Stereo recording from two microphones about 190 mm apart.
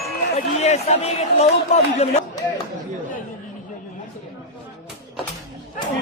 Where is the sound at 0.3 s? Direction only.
35° left (ahead or behind).